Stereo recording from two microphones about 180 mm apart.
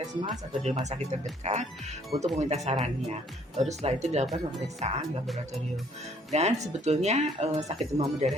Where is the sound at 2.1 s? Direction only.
25° right (ahead or behind).